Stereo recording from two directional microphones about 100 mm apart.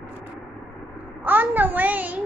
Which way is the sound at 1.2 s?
20° right (ahead or behind).